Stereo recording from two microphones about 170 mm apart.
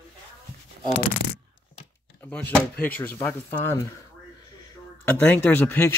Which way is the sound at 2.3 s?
5° left (ahead or behind).